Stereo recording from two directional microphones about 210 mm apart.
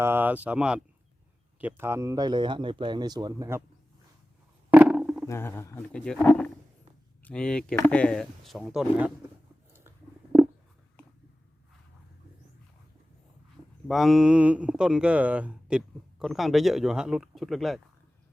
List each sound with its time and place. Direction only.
0.0 s speech: 10° right (ahead or behind)
4.7 s a sound: 5° right (ahead or behind)
5.2 s speech: 10° left (ahead or behind); by 9.1 s 5° right (ahead or behind)
13.8 s speech: centre (ahead or behind)